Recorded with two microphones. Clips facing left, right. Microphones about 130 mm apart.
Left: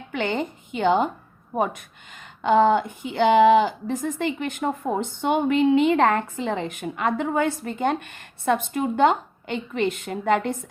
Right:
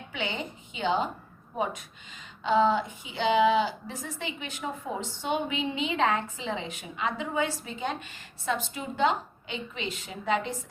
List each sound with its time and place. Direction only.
0.1 s speech: 50° left (ahead or behind)